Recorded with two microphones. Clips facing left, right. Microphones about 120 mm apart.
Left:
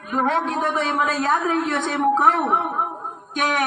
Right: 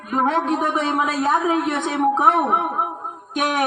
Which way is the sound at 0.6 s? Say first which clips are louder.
Right 1 dB; 15° right (ahead or behind).